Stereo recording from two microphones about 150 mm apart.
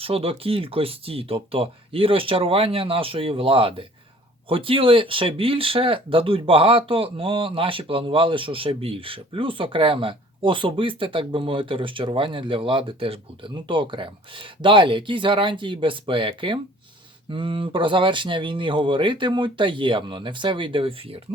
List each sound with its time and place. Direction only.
0.0 s speech: 40° right (ahead or behind)